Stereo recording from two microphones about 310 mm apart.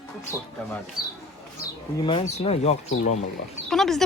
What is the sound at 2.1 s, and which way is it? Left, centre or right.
Speech, centre.